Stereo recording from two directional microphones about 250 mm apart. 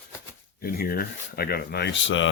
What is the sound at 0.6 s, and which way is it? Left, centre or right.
Speech, left.